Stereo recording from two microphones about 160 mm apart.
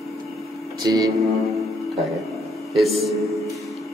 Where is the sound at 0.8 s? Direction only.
20° right (ahead or behind).